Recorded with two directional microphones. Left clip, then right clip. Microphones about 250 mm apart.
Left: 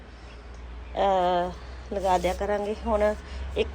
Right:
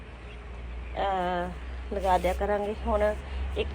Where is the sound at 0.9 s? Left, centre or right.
Left.